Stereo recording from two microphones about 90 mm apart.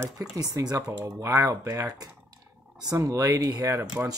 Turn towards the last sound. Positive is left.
turn(degrees=-40)  # may be behind; listen again after turning